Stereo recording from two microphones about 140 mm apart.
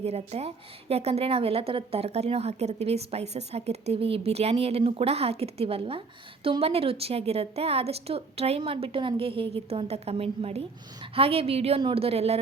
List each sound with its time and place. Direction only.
0.0 s a woman's voice: 50° right (ahead or behind)